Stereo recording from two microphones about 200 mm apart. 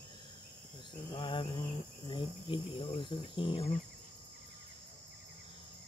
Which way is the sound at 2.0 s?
25° left (ahead or behind).